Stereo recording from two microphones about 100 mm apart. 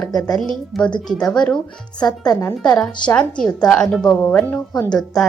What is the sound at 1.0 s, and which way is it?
Speech, 5° left (ahead or behind).